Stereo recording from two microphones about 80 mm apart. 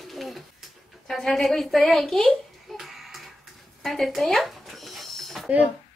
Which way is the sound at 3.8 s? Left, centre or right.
Centre.